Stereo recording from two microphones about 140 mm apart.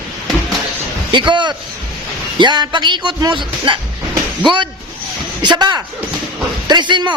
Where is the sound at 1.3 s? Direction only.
35° right (ahead or behind).